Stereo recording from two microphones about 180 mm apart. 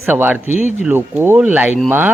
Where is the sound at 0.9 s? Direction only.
10° right (ahead or behind).